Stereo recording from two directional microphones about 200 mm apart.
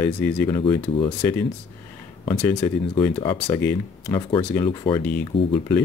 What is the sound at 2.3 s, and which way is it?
Speech, 10° left (ahead or behind).